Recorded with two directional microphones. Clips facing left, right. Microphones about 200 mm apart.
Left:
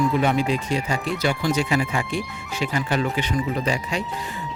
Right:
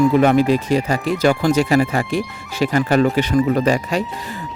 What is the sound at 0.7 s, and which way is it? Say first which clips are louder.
Speech: right 6 dB; 40° right (ahead or behind).